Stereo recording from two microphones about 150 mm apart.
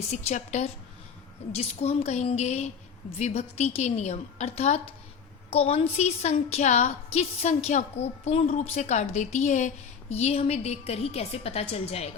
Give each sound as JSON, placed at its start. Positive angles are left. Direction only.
{"t": 0.1, "sound": "a woman's voice", "side_deg": 45}